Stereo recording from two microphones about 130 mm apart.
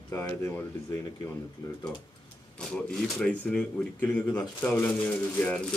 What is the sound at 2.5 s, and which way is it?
Speech, 5° left (ahead or behind).